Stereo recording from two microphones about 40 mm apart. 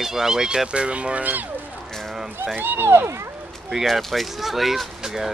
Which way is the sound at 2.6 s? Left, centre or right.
Right.